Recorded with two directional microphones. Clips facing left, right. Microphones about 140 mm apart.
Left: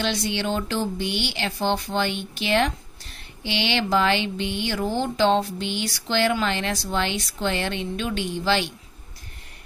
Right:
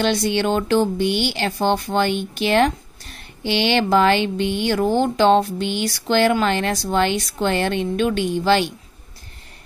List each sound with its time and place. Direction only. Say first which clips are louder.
0.0 s speech: right 6 dB; 50° right (ahead or behind)